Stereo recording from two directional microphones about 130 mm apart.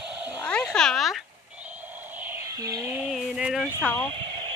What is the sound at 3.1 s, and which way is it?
Speech, 5° right (ahead or behind).